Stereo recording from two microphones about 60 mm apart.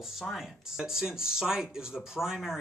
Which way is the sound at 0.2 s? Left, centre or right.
Centre.